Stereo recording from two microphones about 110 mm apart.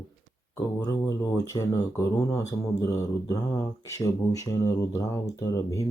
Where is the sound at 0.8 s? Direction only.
35° left (ahead or behind).